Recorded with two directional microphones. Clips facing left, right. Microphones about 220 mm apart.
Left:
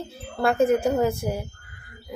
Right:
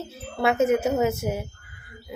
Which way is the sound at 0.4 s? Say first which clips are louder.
Left 1 dB; 5° right (ahead or behind).